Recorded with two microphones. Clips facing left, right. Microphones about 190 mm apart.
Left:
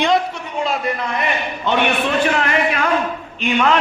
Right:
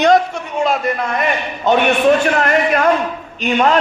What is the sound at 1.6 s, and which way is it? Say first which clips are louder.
A man's voice: right 7 dB; 45° right (ahead or behind).